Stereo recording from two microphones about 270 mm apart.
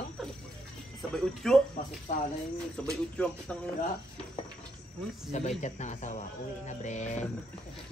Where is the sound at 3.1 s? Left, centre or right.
Centre.